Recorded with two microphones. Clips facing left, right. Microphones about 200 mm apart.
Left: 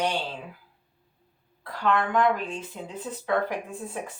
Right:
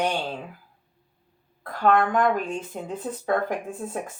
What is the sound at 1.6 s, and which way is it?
Speech, 50° right (ahead or behind).